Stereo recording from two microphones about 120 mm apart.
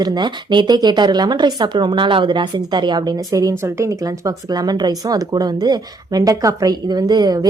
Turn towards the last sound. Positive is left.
turn(degrees=-35)  # may be behind; listen again after turning